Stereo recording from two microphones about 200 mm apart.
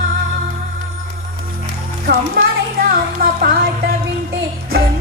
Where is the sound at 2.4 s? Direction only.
55° right (ahead or behind).